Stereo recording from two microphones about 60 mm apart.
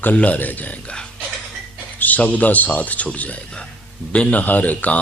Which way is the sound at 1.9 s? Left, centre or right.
Left.